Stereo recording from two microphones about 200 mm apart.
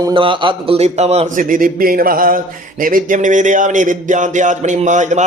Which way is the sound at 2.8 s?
40° right (ahead or behind).